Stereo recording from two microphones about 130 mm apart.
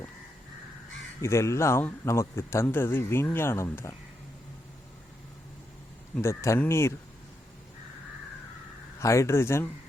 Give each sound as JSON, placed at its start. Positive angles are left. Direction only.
{"t": 1.2, "sound": "speech", "side_deg": 20}
{"t": 6.1, "sound": "speech", "side_deg": 20}
{"t": 9.0, "sound": "speech", "side_deg": 25}